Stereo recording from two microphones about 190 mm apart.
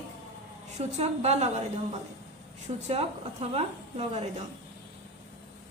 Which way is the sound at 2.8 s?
35° right (ahead or behind).